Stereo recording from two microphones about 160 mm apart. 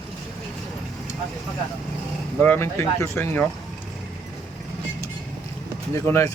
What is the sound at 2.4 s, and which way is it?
Speech, 15° left (ahead or behind).